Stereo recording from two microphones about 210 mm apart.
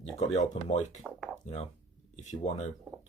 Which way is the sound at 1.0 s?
Centre (ahead or behind).